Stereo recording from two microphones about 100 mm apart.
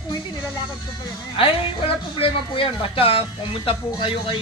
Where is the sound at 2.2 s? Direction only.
65° left (ahead or behind).